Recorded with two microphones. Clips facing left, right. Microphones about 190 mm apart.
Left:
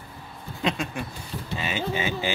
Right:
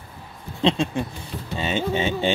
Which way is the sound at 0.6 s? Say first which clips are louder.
Right 7 dB; 25° right (ahead or behind).